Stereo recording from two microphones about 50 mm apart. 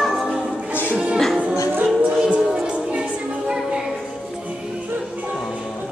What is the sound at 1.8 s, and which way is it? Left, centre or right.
Music, right.